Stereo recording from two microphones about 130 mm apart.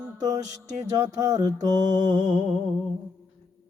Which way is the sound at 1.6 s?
35° right (ahead or behind).